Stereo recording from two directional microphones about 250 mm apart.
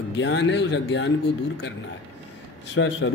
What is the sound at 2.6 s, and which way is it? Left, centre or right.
Speech, left.